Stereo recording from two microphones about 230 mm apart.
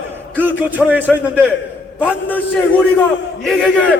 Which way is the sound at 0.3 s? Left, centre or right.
Centre.